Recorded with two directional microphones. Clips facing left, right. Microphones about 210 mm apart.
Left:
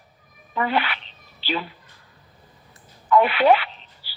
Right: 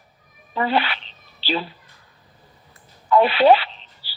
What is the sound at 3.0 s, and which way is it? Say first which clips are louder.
Radio: right 2 dB; 30° right (ahead or behind).